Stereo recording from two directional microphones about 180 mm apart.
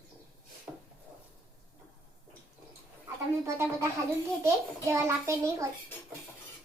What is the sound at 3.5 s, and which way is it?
A child's voice, 15° right (ahead or behind).